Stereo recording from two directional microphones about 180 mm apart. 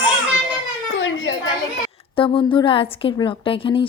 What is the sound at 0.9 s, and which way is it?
Children playing, 90° left.